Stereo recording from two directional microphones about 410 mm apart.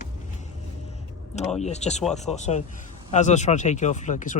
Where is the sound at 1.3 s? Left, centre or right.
Centre.